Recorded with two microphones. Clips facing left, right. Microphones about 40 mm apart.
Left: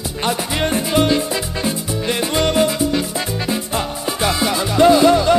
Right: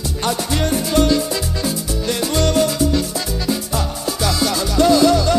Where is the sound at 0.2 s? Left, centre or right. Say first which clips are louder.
Left 1 dB; left.